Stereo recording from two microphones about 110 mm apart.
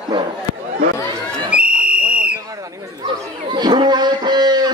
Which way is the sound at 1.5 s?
10° right (ahead or behind).